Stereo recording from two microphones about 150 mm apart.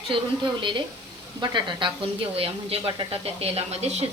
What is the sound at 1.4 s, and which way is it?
Speech, 30° right (ahead or behind).